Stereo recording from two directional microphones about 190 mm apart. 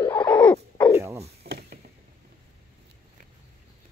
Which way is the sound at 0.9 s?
15° right (ahead or behind).